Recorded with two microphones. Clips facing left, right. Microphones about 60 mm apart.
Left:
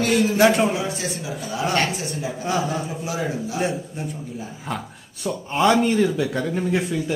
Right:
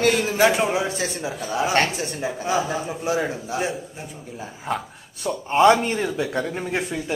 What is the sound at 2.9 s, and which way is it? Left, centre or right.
Speech, right.